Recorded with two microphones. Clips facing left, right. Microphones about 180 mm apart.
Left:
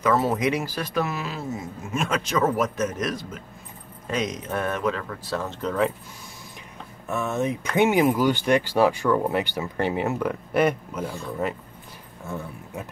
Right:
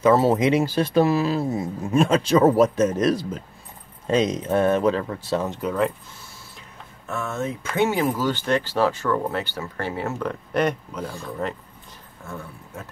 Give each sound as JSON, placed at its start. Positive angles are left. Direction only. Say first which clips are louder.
{"t": 0.0, "sound": "speech", "louder": "right 5 dB", "side_deg": -30}
{"t": 7.1, "sound": "speech", "louder": "left 2 dB", "side_deg": 15}
{"t": 12.7, "sound": "speech", "louder": "left 3 dB", "side_deg": 15}